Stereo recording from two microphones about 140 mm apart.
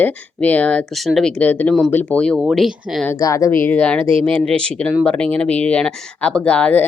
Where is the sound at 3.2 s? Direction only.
20° left (ahead or behind).